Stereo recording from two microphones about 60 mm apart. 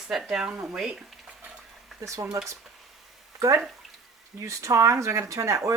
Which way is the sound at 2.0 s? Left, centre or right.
Right.